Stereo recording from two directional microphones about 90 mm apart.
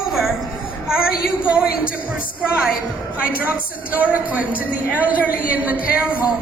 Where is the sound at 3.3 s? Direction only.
20° right (ahead or behind).